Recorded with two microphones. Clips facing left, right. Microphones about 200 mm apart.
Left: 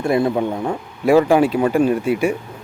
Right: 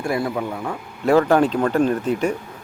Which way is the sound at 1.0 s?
10° left (ahead or behind).